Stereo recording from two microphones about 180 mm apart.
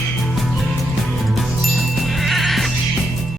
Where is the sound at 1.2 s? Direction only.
Centre (ahead or behind).